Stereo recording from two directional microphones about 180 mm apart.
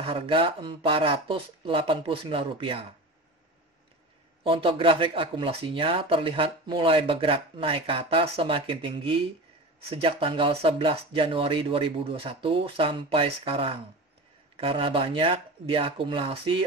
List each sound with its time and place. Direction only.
0.0 s speech: 30° right (ahead or behind)
4.4 s speech: 30° right (ahead or behind)